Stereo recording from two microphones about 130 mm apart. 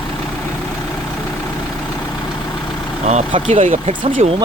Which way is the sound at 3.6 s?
75° right (ahead or behind).